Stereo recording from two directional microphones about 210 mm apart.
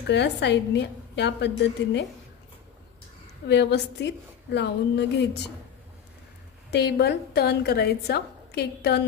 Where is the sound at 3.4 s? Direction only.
55° left (ahead or behind).